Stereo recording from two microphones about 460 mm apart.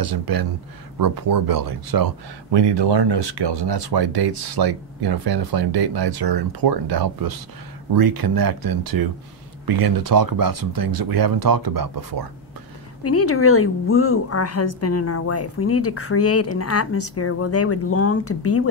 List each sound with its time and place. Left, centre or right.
0.0 s speech: right
13.0 s a woman's voice: left